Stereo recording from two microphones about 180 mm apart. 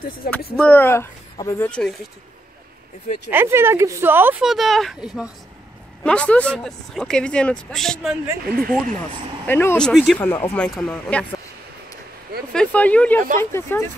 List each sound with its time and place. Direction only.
0.2 s speech: 55° left (ahead or behind)
0.6 s speech: 10° left (ahead or behind)
1.7 s speech: 5° left (ahead or behind)
3.3 s speech: 10° right (ahead or behind)
8.5 s speech: 55° right (ahead or behind)
9.5 s speech: 10° left (ahead or behind)
12.5 s speech: 10° left (ahead or behind)